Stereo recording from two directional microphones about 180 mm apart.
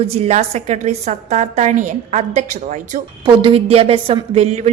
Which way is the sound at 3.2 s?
30° right (ahead or behind).